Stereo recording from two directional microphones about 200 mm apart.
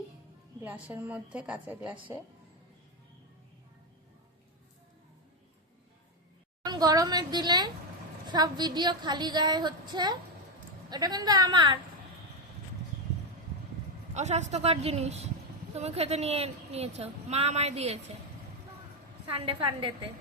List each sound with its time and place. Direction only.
0.6 s a woman's voice: 10° right (ahead or behind)
6.7 s a woman's voice: 20° right (ahead or behind)
14.1 s a woman's voice: 35° right (ahead or behind)
19.3 s a woman's voice: 25° right (ahead or behind)